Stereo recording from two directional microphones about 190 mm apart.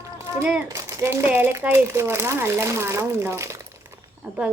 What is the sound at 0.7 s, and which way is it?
Speech, 15° right (ahead or behind).